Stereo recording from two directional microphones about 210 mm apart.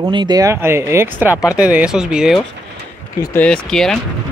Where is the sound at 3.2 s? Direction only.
10° left (ahead or behind).